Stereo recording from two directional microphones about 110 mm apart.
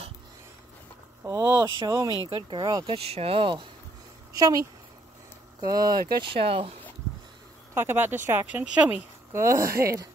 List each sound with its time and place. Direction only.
1.2 s speech: 30° right (ahead or behind)
2.9 s speech: 65° right (ahead or behind)
4.3 s speech: 35° right (ahead or behind)
6.3 s speech: 55° right (ahead or behind)
7.7 s speech: 20° right (ahead or behind)
9.3 s speech: 25° right (ahead or behind)